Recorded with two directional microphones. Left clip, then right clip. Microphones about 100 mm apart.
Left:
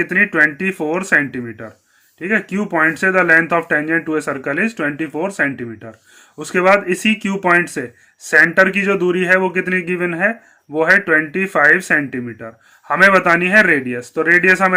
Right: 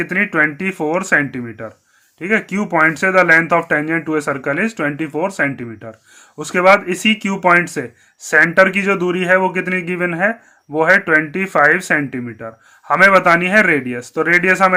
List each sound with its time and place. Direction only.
0.0 s speech: 35° right (ahead or behind)